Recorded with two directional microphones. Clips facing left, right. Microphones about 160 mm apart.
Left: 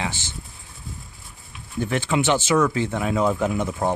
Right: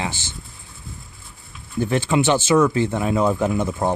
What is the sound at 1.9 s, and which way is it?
Speech, 35° right (ahead or behind).